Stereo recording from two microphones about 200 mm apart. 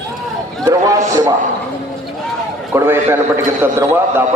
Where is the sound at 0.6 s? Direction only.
15° right (ahead or behind).